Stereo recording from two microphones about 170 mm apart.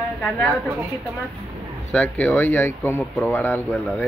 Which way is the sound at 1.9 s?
10° left (ahead or behind).